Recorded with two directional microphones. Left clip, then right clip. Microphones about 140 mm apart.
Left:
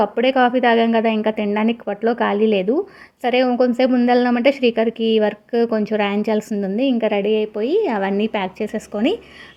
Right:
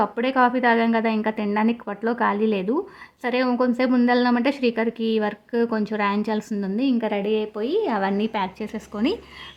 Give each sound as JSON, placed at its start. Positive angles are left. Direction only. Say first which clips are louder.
{"t": 0.0, "sound": "a woman's voice", "louder": "left 4 dB", "side_deg": 15}